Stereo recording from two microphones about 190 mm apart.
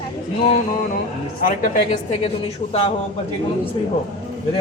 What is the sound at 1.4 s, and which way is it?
Speech, 45° left (ahead or behind).